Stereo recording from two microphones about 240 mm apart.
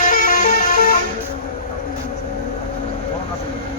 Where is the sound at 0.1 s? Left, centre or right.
Left.